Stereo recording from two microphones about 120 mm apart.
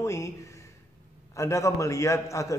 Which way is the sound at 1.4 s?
25° left (ahead or behind).